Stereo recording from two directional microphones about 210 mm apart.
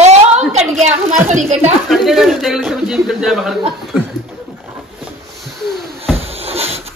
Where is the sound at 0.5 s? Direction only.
35° right (ahead or behind).